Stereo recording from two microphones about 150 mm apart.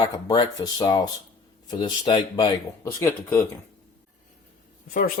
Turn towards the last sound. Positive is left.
turn(degrees=65)  # may be behind; listen again after turning